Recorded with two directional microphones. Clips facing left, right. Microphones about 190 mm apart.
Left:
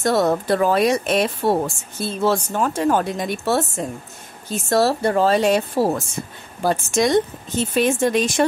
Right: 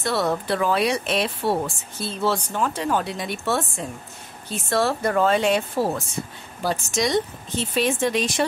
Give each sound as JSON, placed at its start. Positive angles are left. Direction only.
{"t": 0.0, "sound": "speech", "side_deg": 45}
{"t": 6.6, "sound": "speech", "side_deg": 50}